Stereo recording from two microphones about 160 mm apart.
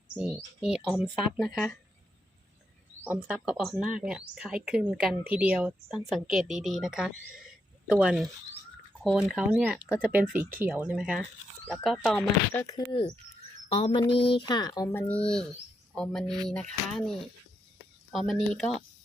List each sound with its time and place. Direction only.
0.2 s speech: 5° right (ahead or behind)
3.0 s speech: 10° right (ahead or behind); by 10.1 s 10° left (ahead or behind)
10.1 s speech: 10° right (ahead or behind)
12.6 s speech: 30° left (ahead or behind)
15.0 s speech: 10° left (ahead or behind)